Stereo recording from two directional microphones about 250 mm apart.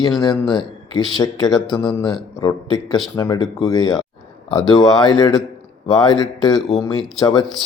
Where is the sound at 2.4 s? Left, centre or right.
Centre.